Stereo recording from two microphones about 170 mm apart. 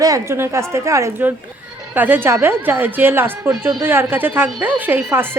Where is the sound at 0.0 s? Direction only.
20° right (ahead or behind).